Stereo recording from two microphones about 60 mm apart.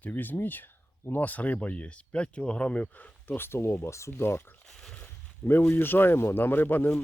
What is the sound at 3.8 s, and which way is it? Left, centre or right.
Speech, left.